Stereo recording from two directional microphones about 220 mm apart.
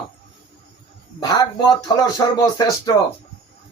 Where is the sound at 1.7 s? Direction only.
15° left (ahead or behind).